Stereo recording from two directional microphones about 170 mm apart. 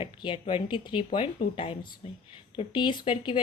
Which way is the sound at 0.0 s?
30° left (ahead or behind).